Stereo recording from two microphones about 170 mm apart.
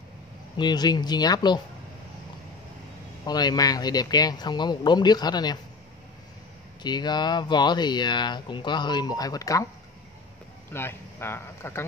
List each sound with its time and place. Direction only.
0.6 s speech: 25° left (ahead or behind)
3.3 s speech: 25° left (ahead or behind)
6.8 s speech: 25° left (ahead or behind)
10.7 s speech: 15° left (ahead or behind)